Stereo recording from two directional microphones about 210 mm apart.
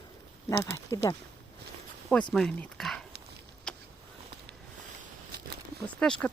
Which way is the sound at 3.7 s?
5° left (ahead or behind).